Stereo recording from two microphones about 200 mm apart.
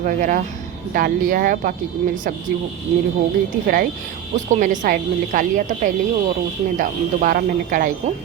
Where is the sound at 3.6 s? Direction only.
45° right (ahead or behind).